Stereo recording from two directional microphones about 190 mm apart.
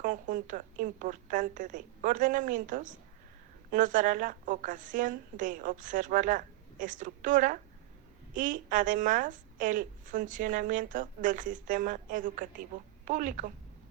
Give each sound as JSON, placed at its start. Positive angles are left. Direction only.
{"t": 0.0, "sound": "a woman's voice", "side_deg": -45}